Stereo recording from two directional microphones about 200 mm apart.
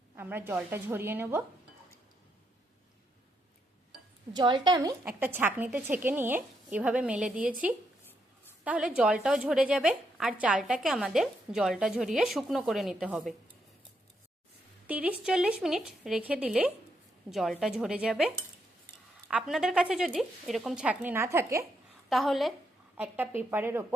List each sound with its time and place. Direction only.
0.2 s a woman's voice: 10° right (ahead or behind)
4.4 s a woman's voice: 20° right (ahead or behind)
5.0 s a woman's voice: 10° right (ahead or behind)
14.8 s a woman's voice: 5° right (ahead or behind)
22.1 s a woman's voice: centre (ahead or behind)